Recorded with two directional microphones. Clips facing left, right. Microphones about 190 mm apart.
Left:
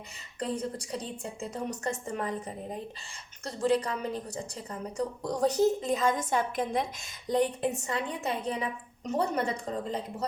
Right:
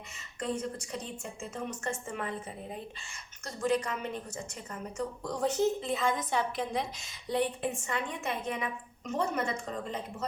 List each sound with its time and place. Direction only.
0.3 s a woman's voice: 35° left (ahead or behind)